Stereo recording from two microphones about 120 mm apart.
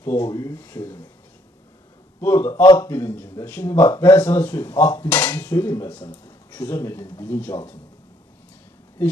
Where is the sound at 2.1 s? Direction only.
20° left (ahead or behind).